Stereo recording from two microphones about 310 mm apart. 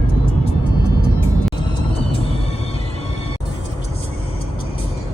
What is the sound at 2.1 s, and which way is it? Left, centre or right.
Music, centre.